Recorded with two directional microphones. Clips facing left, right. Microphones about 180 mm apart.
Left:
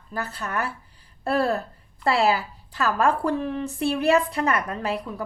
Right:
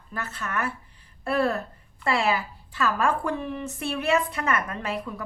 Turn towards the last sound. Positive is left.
turn(degrees=35)  # may be behind; listen again after turning